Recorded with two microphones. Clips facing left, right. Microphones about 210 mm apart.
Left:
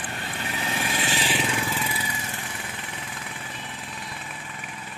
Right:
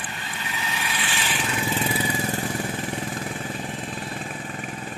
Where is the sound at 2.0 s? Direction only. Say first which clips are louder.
Right 9 dB; 35° right (ahead or behind).